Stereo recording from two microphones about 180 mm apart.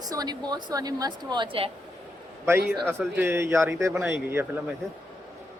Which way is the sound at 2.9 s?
10° right (ahead or behind).